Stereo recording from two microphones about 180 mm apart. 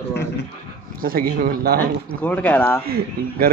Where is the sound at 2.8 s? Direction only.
60° right (ahead or behind).